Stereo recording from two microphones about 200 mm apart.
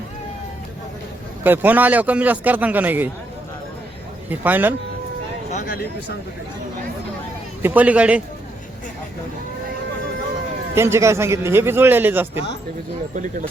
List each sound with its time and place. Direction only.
1.5 s a man's voice: 10° right (ahead or behind)
4.3 s a man's voice: 10° right (ahead or behind)
5.5 s speech: 45° left (ahead or behind)
7.6 s a man's voice: 10° right (ahead or behind)
10.8 s a man's voice: 15° right (ahead or behind)
13.1 s speech: 40° right (ahead or behind)